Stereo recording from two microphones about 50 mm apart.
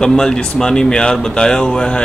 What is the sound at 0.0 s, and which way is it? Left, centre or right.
Speech, centre.